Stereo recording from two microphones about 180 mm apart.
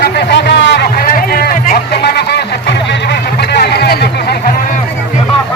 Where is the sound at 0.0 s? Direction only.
70° left (ahead or behind).